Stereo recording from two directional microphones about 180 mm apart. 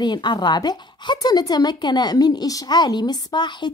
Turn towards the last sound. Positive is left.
turn(degrees=25)  # may be behind; listen again after turning